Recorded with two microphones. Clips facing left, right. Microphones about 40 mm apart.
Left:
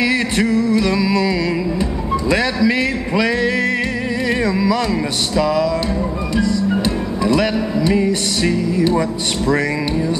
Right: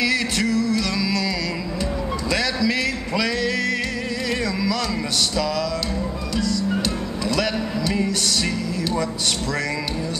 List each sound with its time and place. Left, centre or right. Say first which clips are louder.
0.0 s music: left 4 dB; left
6.3 s music: left 5 dB; left